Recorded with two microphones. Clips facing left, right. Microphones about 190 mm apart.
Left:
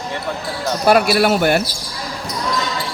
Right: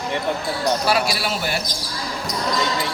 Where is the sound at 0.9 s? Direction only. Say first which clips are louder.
Left 8 dB; 55° left (ahead or behind).